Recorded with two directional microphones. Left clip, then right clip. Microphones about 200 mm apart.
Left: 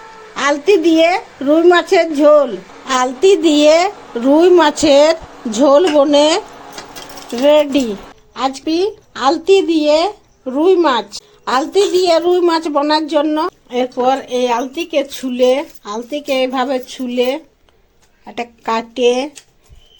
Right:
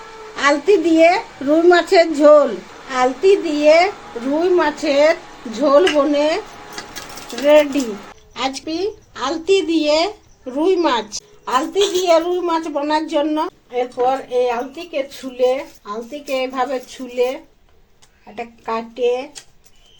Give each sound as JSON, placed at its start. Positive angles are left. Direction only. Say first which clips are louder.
{"t": 0.3, "sound": "a woman's voice", "louder": "left 2 dB", "side_deg": 25}
{"t": 2.9, "sound": "speech", "louder": "left 3 dB", "side_deg": 50}
{"t": 7.4, "sound": "speech", "louder": "left 1 dB", "side_deg": 35}
{"t": 8.3, "sound": "a woman's voice", "louder": "left 4 dB", "side_deg": 20}
{"t": 8.6, "sound": "speech", "louder": "left 6 dB", "side_deg": 50}
{"t": 13.7, "sound": "speech", "louder": "left 3 dB", "side_deg": 55}